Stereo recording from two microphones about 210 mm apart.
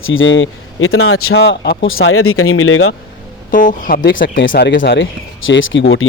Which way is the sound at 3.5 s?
40° left (ahead or behind).